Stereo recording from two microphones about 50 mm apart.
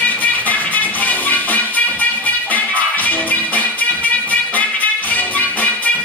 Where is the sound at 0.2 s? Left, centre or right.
Left.